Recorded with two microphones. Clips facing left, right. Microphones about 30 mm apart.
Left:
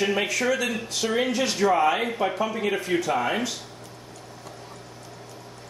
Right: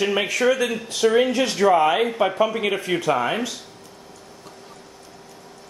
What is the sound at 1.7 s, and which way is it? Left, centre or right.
Speech, right.